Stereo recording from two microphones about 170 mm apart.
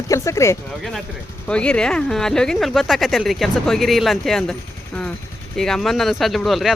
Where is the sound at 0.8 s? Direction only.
Centre (ahead or behind).